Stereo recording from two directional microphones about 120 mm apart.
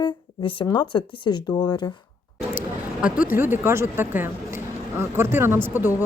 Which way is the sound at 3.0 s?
10° right (ahead or behind).